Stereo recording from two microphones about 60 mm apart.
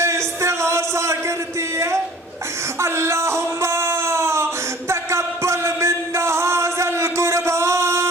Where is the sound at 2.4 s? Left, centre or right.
Right.